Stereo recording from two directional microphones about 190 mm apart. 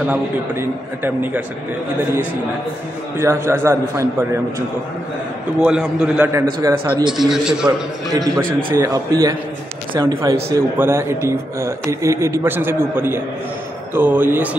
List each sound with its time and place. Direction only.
0.0 s a man's voice: 10° right (ahead or behind)
3.2 s a man's voice: 15° right (ahead or behind)
5.6 s a man's voice: 5° right (ahead or behind)
6.6 s speech: 20° right (ahead or behind)
7.2 s a man's voice: 5° right (ahead or behind)
8.5 s speech: 50° right (ahead or behind)
8.7 s a man's voice: 15° right (ahead or behind)